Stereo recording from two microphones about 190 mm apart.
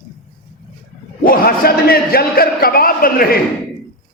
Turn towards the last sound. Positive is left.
turn(degrees=50)  # may be behind; listen again after turning